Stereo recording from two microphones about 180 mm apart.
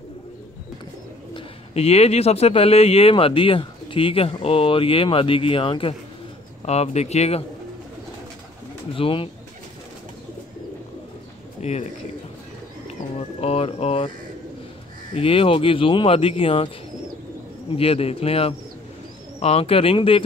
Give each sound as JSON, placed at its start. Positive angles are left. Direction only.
{"t": 1.3, "sound": "speech", "side_deg": 35}
{"t": 8.9, "sound": "speech", "side_deg": 30}
{"t": 11.6, "sound": "speech", "side_deg": 35}
{"t": 13.4, "sound": "speech", "side_deg": 35}
{"t": 15.1, "sound": "speech", "side_deg": 30}
{"t": 17.7, "sound": "speech", "side_deg": 30}